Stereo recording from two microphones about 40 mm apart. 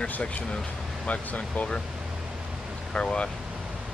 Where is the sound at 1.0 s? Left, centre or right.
Left.